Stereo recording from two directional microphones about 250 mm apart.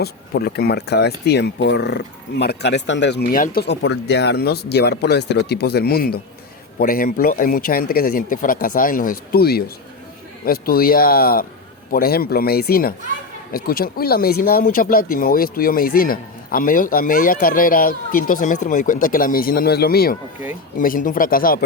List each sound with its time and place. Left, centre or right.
0.0 s speech: left